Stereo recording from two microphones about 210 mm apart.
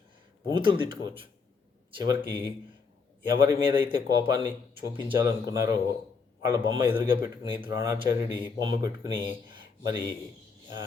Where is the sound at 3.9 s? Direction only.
20° right (ahead or behind).